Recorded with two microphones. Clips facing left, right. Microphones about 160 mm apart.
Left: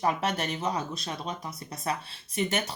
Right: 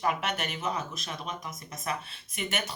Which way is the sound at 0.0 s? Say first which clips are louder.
Left 2 dB; 35° left (ahead or behind).